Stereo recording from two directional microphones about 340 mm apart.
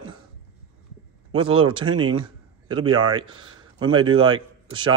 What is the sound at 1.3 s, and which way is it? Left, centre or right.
A man's voice, centre.